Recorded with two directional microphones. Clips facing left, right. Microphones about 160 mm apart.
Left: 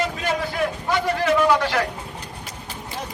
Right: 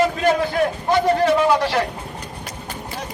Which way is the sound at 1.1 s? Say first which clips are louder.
Right 1 dB; 30° right (ahead or behind).